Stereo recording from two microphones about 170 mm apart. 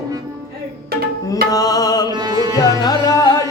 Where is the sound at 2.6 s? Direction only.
20° left (ahead or behind).